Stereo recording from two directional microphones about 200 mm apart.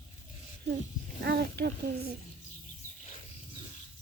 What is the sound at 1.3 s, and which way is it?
Speech, 55° right (ahead or behind).